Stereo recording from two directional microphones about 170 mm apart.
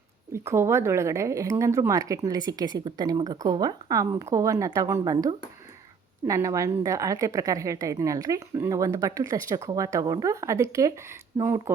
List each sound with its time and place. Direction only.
0.3 s a woman's voice: 15° right (ahead or behind)
6.2 s a woman's voice: 20° right (ahead or behind)